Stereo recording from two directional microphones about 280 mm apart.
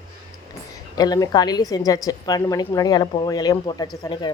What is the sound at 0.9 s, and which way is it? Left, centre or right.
A woman's voice, centre.